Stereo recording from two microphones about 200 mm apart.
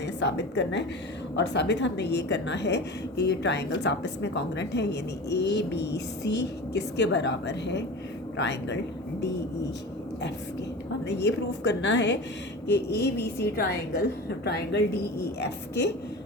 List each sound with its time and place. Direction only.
0.0 s a woman's voice: 60° left (ahead or behind)
11.0 s a woman's voice: 60° left (ahead or behind)